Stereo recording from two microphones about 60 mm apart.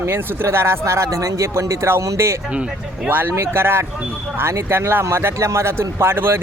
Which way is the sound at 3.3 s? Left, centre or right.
Right.